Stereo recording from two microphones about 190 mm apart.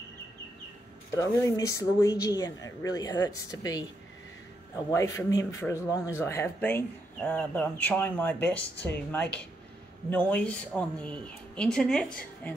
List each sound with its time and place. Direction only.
1.1 s speech: 15° left (ahead or behind)
4.9 s speech: 15° left (ahead or behind)